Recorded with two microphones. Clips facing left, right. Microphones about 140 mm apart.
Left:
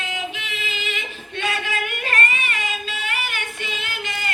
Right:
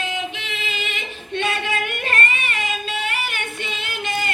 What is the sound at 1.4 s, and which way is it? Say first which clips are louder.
Female singing: right 2 dB; 25° right (ahead or behind).